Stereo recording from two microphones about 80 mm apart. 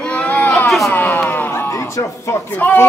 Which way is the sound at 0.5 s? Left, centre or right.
Centre.